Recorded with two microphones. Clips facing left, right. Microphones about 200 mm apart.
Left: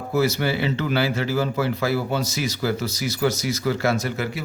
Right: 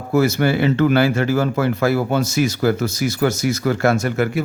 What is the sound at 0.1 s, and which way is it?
Speech, 50° right (ahead or behind).